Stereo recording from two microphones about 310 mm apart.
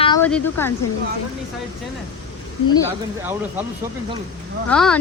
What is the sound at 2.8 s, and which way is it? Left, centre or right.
Speech, centre.